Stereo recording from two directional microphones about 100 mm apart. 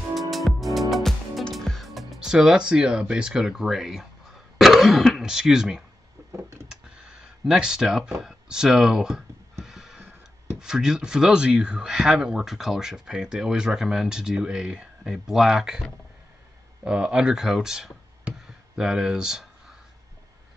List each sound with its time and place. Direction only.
0.1 s music: centre (ahead or behind)
4.6 s speech: centre (ahead or behind)
6.3 s a sound: 25° right (ahead or behind)
6.7 s a sound: 10° right (ahead or behind)
10.6 s speech: 5° right (ahead or behind)
16.8 s speech: 10° right (ahead or behind)